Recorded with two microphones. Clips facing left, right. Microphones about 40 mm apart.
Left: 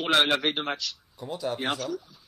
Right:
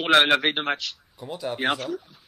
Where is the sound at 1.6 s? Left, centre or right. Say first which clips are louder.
Right 4 dB; right.